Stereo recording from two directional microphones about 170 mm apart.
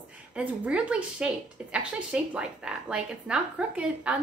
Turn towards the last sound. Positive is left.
turn(degrees=-5)  # may be behind; listen again after turning